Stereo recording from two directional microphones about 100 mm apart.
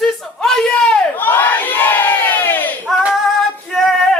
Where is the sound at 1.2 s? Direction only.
20° left (ahead or behind).